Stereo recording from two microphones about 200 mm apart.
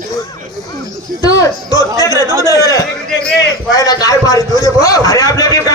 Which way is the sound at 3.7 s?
15° left (ahead or behind).